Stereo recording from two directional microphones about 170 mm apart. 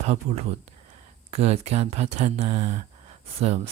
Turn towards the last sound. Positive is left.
turn(degrees=-40)  # may be behind; listen again after turning